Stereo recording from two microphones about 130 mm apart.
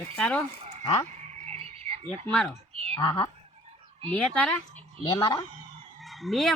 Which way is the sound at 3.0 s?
35° left (ahead or behind).